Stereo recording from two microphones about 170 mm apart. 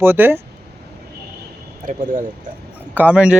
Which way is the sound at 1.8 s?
50° right (ahead or behind).